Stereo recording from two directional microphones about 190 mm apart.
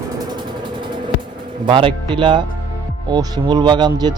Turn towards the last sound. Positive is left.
turn(degrees=-20)  # may be behind; listen again after turning